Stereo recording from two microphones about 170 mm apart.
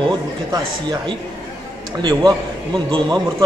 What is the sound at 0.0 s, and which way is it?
Speech, 25° right (ahead or behind).